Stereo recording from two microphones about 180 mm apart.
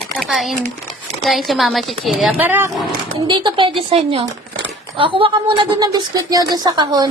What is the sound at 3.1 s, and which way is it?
Speech, 25° right (ahead or behind).